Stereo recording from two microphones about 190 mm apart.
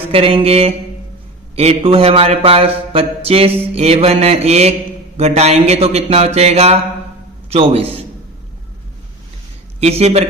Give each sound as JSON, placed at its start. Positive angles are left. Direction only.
{"t": 0.1, "sound": "speech", "side_deg": -30}
{"t": 9.8, "sound": "speech", "side_deg": -35}